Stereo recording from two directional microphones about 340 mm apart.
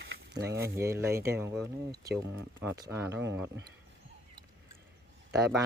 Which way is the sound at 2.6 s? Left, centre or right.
Centre.